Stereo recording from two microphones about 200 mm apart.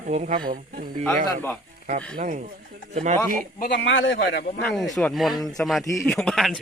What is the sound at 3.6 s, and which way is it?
Speech, 45° left (ahead or behind).